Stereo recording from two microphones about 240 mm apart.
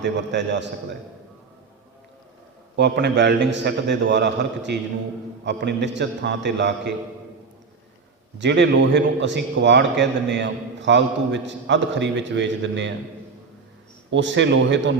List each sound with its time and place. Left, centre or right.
0.0 s a man's voice: right
2.7 s a man's voice: right
8.4 s a man's voice: right
14.1 s a man's voice: right